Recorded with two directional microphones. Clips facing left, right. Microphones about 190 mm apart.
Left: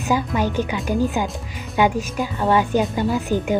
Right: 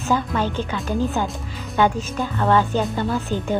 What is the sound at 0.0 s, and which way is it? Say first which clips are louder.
A woman's voice: left 1 dB; 10° left (ahead or behind).